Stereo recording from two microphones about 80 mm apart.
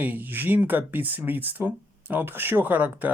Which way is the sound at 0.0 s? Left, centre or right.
Right.